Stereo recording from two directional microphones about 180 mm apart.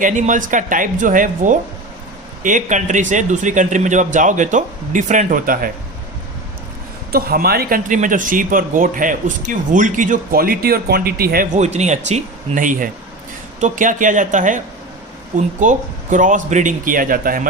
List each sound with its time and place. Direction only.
0.0 s speech: 45° right (ahead or behind)
7.1 s speech: 55° right (ahead or behind)
11.5 s speech: 40° right (ahead or behind)